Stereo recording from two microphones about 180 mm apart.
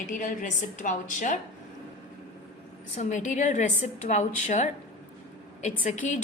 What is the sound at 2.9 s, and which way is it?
A woman's voice, 40° left (ahead or behind).